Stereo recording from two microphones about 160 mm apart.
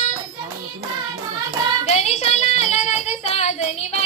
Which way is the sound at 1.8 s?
40° left (ahead or behind).